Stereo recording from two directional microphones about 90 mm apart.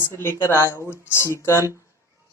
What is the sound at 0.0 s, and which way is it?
A man's voice, 30° left (ahead or behind).